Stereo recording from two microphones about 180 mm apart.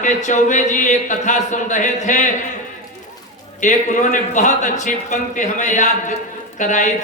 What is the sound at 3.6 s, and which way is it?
A man's voice, 45° left (ahead or behind).